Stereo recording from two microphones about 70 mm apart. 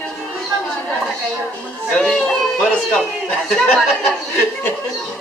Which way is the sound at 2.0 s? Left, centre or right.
Centre.